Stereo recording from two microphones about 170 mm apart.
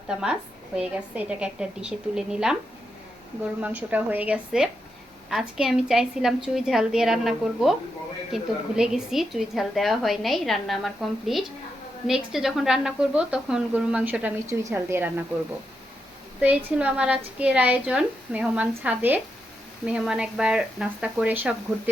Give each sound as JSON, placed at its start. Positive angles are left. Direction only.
{"t": 0.1, "sound": "a woman's voice", "side_deg": -5}
{"t": 3.6, "sound": "a woman's voice", "side_deg": -10}
{"t": 16.4, "sound": "a woman's voice", "side_deg": -5}